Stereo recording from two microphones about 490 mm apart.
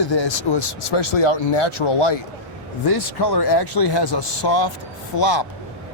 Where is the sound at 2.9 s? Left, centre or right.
Left.